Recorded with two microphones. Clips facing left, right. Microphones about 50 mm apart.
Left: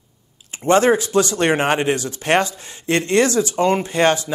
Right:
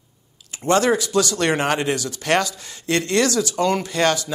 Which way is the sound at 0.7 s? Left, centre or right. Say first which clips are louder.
Left 3 dB; left.